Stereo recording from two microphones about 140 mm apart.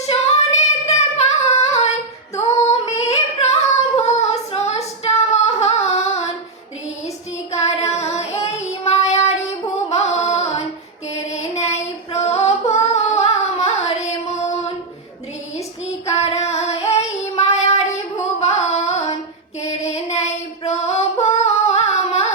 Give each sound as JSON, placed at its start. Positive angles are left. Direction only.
{"t": 0.1, "sound": "singing", "side_deg": 50}
{"t": 2.8, "sound": "female singing", "side_deg": 50}
{"t": 7.5, "sound": "child singing", "side_deg": 50}
{"t": 9.6, "sound": "music", "side_deg": 50}
{"t": 11.3, "sound": "female singing", "side_deg": 50}
{"t": 16.1, "sound": "female singing", "side_deg": 50}